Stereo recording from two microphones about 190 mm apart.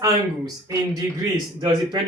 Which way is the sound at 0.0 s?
15° right (ahead or behind).